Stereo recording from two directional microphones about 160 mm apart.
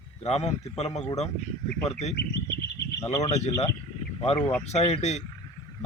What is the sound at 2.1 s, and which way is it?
Bird, 90° left.